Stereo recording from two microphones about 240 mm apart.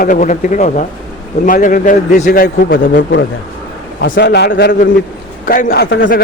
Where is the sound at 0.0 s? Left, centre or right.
Left.